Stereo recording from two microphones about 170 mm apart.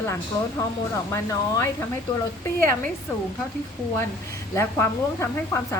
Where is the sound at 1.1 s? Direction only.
15° left (ahead or behind).